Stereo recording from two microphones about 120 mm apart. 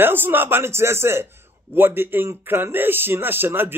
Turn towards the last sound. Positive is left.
turn(degrees=-15)  # may be behind; listen again after turning